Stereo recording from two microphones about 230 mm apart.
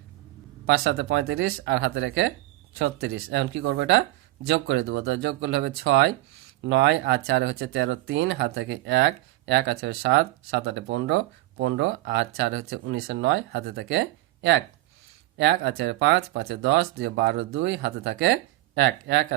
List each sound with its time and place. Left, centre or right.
0.7 s speech: right